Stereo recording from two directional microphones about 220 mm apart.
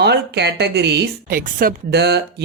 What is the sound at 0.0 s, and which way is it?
A woman's voice, 50° right (ahead or behind).